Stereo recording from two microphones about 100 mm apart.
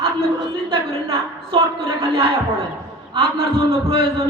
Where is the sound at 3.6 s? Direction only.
65° right (ahead or behind).